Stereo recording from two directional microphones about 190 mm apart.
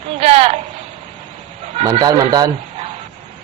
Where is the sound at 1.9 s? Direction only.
20° right (ahead or behind).